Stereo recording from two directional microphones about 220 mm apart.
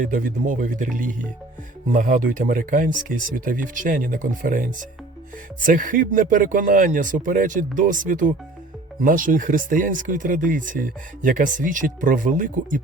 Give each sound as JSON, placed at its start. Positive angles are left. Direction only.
{"t": 0.0, "sound": "speech", "side_deg": -35}